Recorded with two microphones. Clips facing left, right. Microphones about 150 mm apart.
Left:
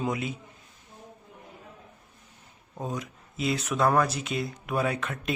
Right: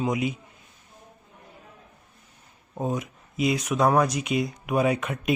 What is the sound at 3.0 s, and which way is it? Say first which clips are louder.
Speech: right 5 dB; 15° right (ahead or behind).